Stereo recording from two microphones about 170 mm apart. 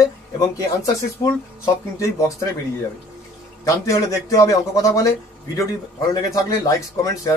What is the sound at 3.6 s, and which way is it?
A man's voice, 20° left (ahead or behind).